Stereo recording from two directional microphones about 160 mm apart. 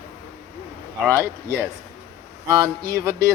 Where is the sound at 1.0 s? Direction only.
15° right (ahead or behind).